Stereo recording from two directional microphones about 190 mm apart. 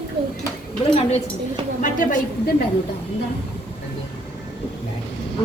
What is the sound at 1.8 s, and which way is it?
Speech, 45° left (ahead or behind).